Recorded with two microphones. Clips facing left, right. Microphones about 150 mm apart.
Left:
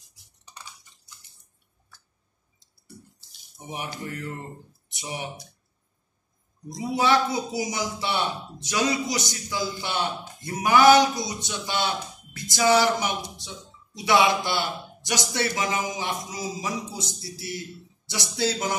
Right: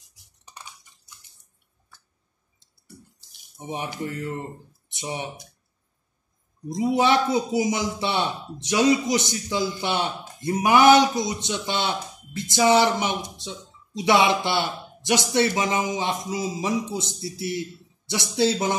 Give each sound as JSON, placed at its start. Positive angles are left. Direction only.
{"t": 3.6, "sound": "a man's voice", "side_deg": -20}
{"t": 6.7, "sound": "a man's voice", "side_deg": -20}